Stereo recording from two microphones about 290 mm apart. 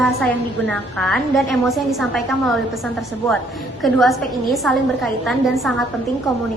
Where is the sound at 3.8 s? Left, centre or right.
Centre.